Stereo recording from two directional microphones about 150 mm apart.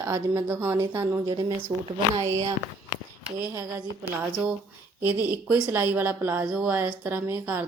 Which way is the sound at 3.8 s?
10° right (ahead or behind).